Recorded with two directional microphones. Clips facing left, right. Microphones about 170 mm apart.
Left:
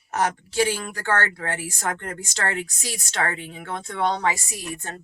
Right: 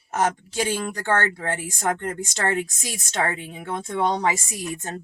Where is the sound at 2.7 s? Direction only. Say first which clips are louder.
Left 1 dB; 25° right (ahead or behind).